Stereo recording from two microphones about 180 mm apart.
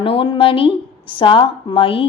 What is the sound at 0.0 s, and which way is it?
A woman's voice, 30° left (ahead or behind).